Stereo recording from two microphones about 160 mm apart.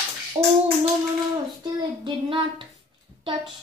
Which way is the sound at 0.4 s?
30° right (ahead or behind).